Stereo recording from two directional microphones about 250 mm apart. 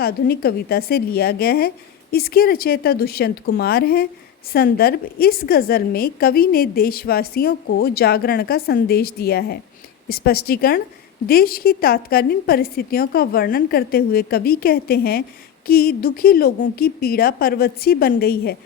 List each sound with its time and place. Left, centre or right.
0.0 s a woman's voice: left